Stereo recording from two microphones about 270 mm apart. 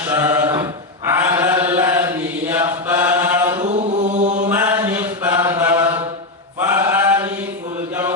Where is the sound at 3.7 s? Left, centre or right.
Right.